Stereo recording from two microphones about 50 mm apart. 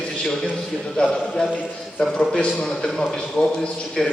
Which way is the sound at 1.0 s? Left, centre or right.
Left.